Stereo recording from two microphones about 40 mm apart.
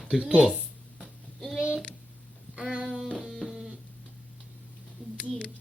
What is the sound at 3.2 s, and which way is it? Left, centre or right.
Mains hum, centre.